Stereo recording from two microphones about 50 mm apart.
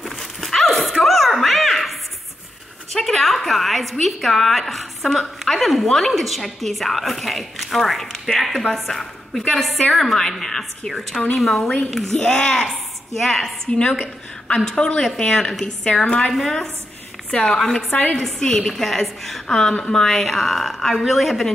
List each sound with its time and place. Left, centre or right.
0.1 s a sound: centre
2.9 s a woman's voice: centre
13.7 s a woman's voice: centre
17.3 s speech: centre
17.6 s a woman's voice: centre